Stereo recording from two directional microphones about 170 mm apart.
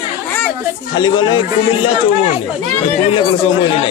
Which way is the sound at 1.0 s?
25° left (ahead or behind).